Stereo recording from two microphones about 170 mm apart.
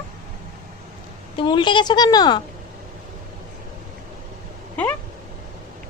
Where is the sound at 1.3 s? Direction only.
25° left (ahead or behind).